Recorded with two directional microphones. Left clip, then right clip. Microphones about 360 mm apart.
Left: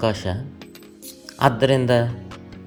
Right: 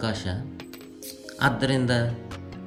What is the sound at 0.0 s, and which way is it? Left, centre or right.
Speech, centre.